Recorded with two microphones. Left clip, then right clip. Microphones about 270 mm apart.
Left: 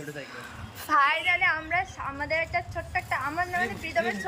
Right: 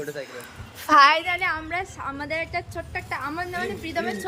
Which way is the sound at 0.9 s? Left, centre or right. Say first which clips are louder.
Right 7 dB; right.